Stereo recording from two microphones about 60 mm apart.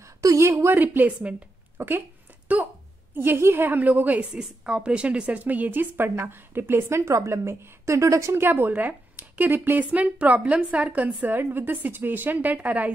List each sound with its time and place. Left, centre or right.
0.2 s a woman's voice: right
0.5 s a woman's voice: right
0.7 s a woman's voice: right
1.8 s a sound: right
3.2 s a woman's voice: right
3.6 s speech: right
4.3 s a woman's voice: centre; by 8.5 s right
8.5 s speech: right
11.3 s a woman's voice: right